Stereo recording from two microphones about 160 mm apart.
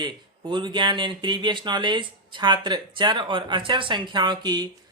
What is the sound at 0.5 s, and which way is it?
Speech, 30° right (ahead or behind).